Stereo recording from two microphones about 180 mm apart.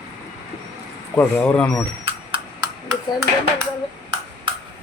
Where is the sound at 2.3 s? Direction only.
20° right (ahead or behind).